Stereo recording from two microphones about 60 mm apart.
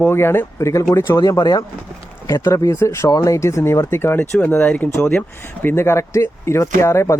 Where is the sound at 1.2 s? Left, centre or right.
Left.